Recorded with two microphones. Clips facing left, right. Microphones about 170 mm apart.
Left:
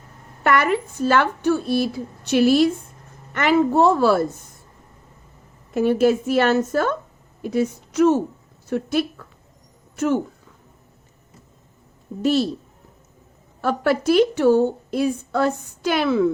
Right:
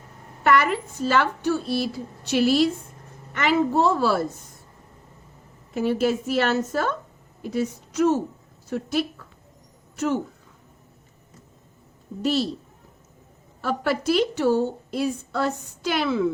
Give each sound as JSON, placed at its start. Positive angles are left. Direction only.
{"t": 0.4, "sound": "a woman's voice", "side_deg": 55}
{"t": 5.7, "sound": "a woman's voice", "side_deg": 55}
{"t": 12.2, "sound": "a woman's voice", "side_deg": 50}
{"t": 13.6, "sound": "a woman's voice", "side_deg": 55}